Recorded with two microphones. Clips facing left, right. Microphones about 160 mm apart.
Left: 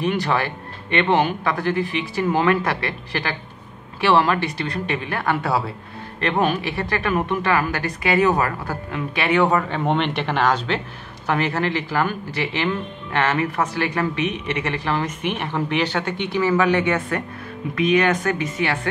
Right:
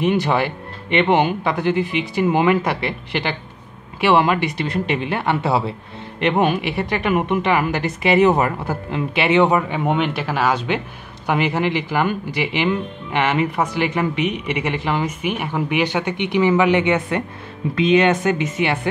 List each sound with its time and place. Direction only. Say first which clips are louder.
0.0 s speech: right 3 dB; 20° right (ahead or behind)